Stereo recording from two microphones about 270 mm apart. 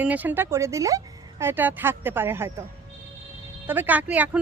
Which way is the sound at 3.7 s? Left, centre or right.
Centre.